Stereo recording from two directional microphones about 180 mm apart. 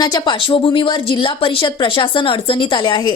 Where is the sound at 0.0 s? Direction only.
25° left (ahead or behind).